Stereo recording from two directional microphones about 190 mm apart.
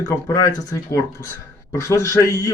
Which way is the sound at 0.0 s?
15° left (ahead or behind).